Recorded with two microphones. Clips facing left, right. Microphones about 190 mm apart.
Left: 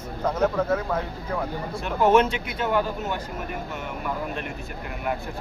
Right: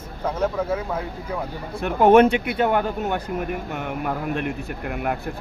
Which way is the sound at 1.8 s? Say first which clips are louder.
Right 5 dB; 55° right (ahead or behind).